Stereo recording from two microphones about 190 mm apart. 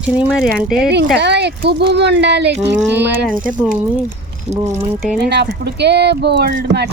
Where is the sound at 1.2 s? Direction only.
60° right (ahead or behind).